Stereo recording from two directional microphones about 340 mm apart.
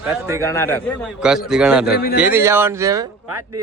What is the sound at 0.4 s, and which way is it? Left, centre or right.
A man's voice, centre.